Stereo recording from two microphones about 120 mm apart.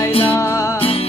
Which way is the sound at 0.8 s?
55° left (ahead or behind).